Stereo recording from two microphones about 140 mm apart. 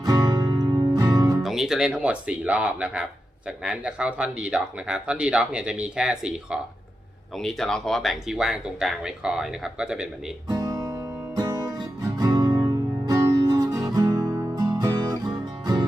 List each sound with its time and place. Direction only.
0.0 s music: 25° right (ahead or behind)
1.4 s speech: centre (ahead or behind)
10.5 s music: 25° right (ahead or behind)